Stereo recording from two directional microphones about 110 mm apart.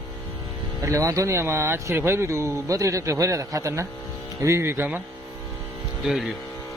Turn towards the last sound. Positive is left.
turn(degrees=-5)  # may be behind; listen again after turning